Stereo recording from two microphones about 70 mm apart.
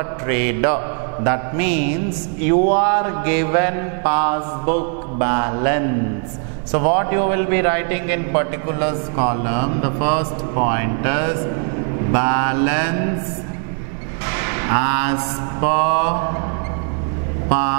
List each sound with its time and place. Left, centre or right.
0.3 s a man's voice: centre
14.2 s mantra: centre
17.5 s speech: centre